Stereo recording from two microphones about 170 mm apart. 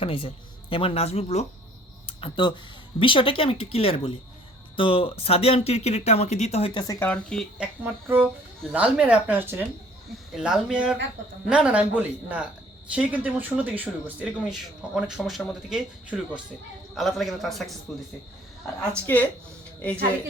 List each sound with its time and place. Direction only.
0.0 s speech: 30° left (ahead or behind)
7.0 s a man's voice: 5° left (ahead or behind)
7.6 s a man's voice: 10° right (ahead or behind)
19.0 s speech: 10° left (ahead or behind)